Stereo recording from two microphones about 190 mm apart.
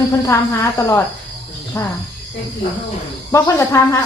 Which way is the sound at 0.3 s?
15° left (ahead or behind).